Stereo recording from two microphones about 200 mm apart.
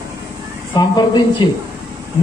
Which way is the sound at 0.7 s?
20° left (ahead or behind).